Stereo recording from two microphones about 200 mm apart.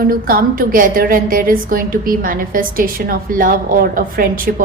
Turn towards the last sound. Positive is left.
turn(degrees=-45)  # may be behind; listen again after turning